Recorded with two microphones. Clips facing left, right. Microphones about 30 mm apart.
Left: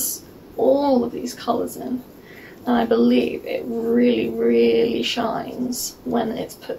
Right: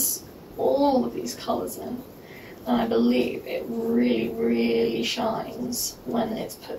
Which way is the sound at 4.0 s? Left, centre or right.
Left.